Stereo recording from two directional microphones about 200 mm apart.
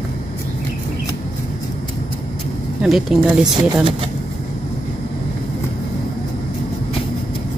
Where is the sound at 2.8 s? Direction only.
Centre (ahead or behind).